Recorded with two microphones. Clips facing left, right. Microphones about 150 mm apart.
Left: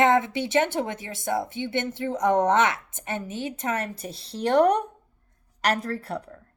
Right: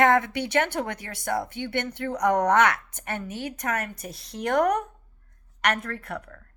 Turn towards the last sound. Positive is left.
turn(degrees=30)  # may be behind; listen again after turning